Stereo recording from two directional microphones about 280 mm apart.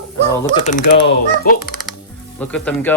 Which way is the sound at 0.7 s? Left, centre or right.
Left.